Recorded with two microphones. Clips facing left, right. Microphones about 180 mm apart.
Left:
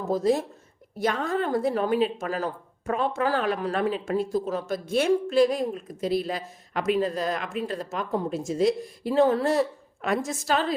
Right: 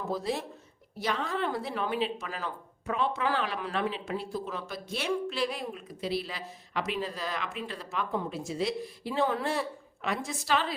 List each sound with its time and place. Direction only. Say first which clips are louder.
0.1 s speech: left 11 dB; 45° left (ahead or behind)